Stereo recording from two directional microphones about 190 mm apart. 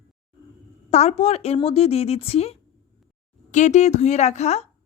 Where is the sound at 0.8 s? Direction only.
35° left (ahead or behind).